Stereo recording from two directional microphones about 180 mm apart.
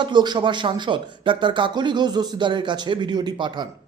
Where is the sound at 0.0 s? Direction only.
25° right (ahead or behind).